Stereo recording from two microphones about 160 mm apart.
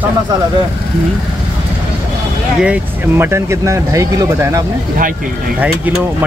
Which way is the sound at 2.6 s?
10° right (ahead or behind).